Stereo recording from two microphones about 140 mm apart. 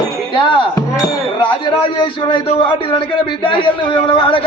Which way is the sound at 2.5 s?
40° left (ahead or behind).